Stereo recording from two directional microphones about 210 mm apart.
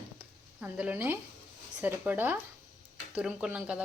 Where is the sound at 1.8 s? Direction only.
10° right (ahead or behind).